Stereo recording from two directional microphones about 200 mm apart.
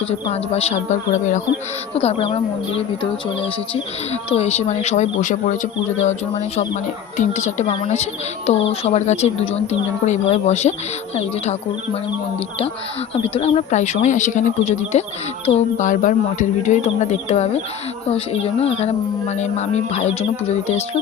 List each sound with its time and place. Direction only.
0.1 s speech: 30° left (ahead or behind)
13.2 s speech: 30° left (ahead or behind)